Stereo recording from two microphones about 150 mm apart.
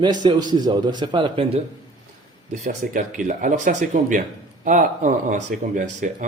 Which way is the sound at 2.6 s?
55° right (ahead or behind).